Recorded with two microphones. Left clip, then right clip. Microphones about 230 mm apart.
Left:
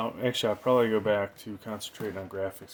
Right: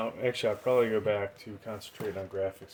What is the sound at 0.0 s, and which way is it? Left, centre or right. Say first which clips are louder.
Speech: left 1 dB; left.